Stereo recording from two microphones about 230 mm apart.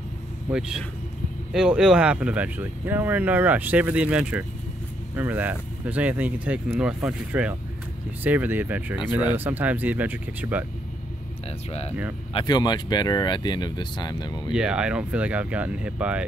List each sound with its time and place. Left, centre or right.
0.5 s speech: centre
12.4 s speech: centre
14.5 s speech: centre